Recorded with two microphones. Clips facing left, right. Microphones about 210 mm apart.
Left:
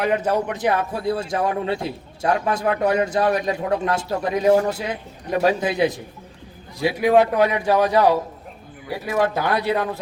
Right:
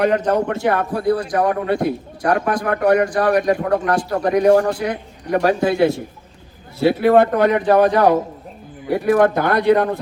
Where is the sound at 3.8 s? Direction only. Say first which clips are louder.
Right 4 dB; 25° left (ahead or behind).